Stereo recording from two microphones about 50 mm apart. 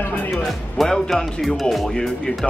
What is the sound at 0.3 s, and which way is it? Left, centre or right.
Speech, centre.